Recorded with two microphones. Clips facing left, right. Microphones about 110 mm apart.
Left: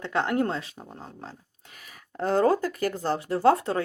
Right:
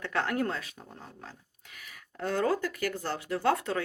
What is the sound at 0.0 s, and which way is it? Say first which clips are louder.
A woman's voice: left 4 dB; 25° left (ahead or behind).